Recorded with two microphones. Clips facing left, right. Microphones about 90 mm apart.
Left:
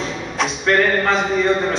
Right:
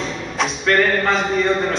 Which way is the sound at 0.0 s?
Centre (ahead or behind).